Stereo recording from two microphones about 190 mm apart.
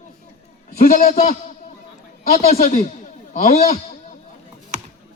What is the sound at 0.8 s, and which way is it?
Speech, 45° left (ahead or behind).